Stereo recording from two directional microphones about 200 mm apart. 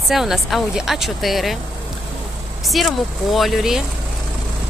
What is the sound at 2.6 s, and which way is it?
Speech, centre (ahead or behind).